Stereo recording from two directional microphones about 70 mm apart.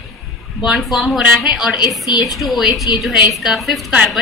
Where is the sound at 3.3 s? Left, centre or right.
Centre.